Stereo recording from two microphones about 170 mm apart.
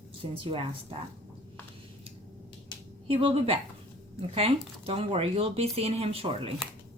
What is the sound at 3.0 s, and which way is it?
Speech, 35° right (ahead or behind).